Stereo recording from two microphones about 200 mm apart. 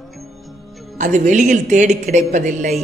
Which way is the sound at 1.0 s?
40° right (ahead or behind).